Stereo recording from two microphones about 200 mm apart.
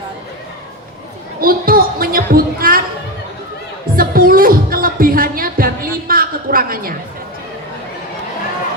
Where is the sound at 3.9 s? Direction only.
45° right (ahead or behind).